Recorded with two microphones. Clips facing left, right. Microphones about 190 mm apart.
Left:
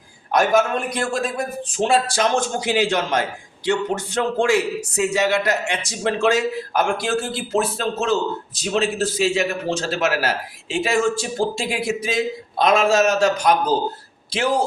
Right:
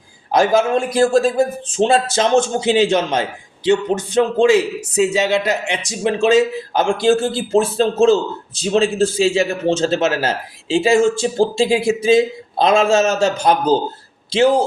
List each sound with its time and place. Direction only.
0.3 s a man's voice: 30° right (ahead or behind)